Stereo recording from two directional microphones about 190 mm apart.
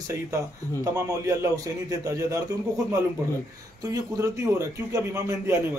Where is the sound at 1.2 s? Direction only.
15° right (ahead or behind).